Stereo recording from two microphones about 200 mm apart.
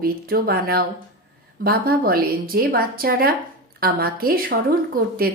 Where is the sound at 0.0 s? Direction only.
50° right (ahead or behind).